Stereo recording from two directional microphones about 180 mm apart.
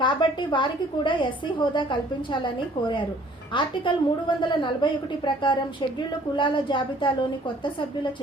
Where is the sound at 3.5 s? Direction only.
25° left (ahead or behind).